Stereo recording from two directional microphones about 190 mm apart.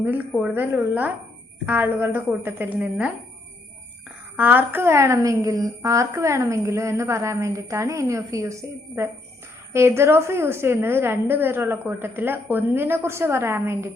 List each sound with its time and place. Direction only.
0.0 s a woman's voice: 10° right (ahead or behind)
0.5 s a woman's voice: 10° right (ahead or behind)
4.4 s a woman's voice: 10° right (ahead or behind)